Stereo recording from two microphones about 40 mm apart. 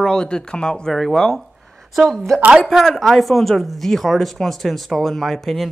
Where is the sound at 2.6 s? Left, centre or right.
Centre.